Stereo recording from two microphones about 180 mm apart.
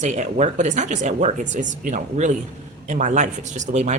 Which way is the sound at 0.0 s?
40° right (ahead or behind).